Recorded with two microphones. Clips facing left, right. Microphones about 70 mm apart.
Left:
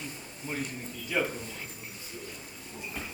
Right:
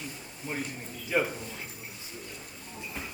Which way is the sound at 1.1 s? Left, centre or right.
Centre.